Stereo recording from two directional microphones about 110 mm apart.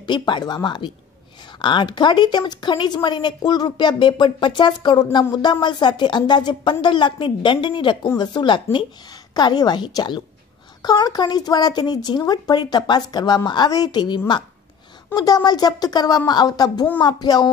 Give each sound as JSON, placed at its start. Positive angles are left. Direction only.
{"t": 0.0, "sound": "speech", "side_deg": 45}